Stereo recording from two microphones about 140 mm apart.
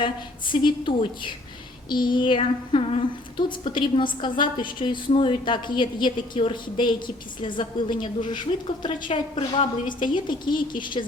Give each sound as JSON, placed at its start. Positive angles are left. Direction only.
{"t": 0.0, "sound": "speech", "side_deg": 35}